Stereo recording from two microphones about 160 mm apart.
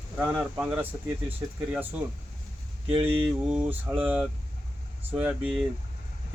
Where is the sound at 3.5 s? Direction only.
10° right (ahead or behind).